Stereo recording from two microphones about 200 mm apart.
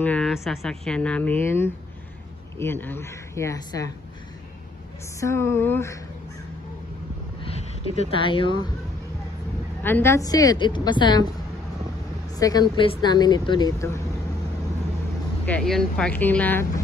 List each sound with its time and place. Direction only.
0.0 s speech: 5° left (ahead or behind)
5.2 s speech: 15° left (ahead or behind)
7.4 s speech: 30° left (ahead or behind)
9.8 s speech: 10° left (ahead or behind)
12.4 s speech: 20° left (ahead or behind)
15.4 s speech: 5° left (ahead or behind)